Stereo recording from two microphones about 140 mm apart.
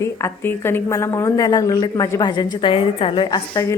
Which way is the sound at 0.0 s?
20° left (ahead or behind).